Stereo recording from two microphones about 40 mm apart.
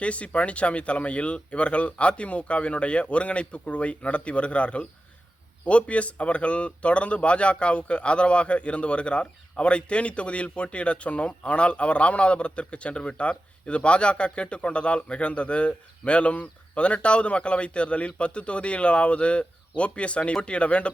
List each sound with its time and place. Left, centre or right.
0.0 s speech: left